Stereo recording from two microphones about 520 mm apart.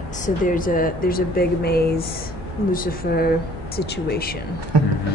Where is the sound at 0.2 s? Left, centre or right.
Centre.